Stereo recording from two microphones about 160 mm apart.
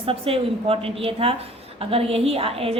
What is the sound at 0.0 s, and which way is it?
A woman's voice, 35° right (ahead or behind).